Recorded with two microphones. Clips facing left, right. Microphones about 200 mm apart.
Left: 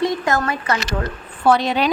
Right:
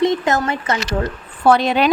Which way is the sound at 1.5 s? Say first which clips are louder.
Right 2 dB; 55° right (ahead or behind).